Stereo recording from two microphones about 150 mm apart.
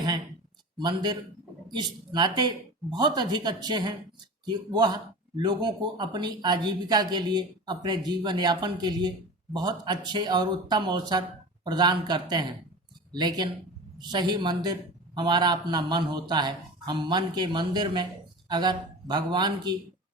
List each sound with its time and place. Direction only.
0.8 s speech: 30° right (ahead or behind)